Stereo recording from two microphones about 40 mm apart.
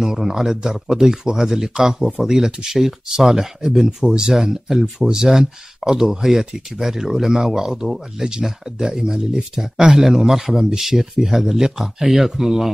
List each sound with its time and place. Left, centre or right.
0.0 s speech: centre
4.0 s speech: right
4.3 s speech: centre